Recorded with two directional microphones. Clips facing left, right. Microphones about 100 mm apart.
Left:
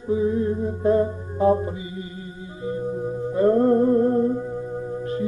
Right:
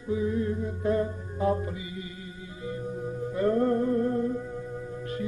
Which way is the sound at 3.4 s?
30° left (ahead or behind).